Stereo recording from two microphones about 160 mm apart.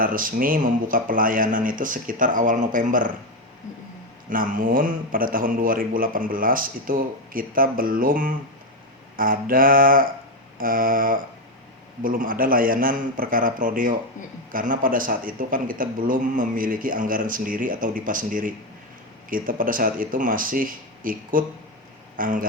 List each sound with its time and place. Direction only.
0.0 s speech: 60° right (ahead or behind)
4.3 s speech: 55° right (ahead or behind)